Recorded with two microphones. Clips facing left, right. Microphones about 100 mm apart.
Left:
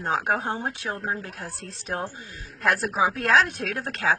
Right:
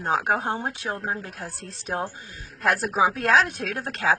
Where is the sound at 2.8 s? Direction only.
50° right (ahead or behind).